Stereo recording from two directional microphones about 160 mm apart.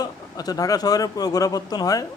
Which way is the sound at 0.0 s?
25° left (ahead or behind).